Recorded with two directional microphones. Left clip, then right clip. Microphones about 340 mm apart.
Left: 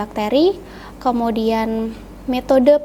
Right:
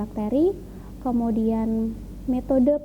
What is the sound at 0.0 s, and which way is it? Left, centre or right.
Speech, centre.